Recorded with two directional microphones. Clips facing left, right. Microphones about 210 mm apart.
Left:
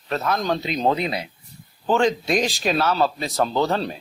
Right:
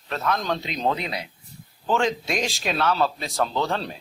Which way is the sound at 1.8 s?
Centre (ahead or behind).